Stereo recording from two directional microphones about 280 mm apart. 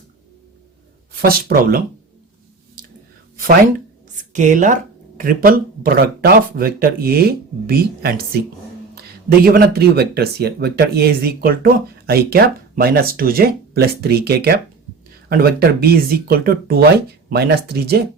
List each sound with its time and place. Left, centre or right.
1.1 s speech: right
4.2 s speech: right